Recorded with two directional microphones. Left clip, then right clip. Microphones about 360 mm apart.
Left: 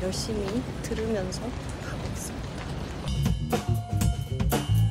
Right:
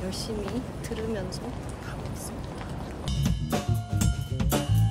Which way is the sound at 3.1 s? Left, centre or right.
Centre.